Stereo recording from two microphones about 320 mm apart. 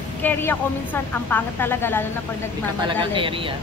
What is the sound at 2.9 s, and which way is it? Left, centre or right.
Speech, centre.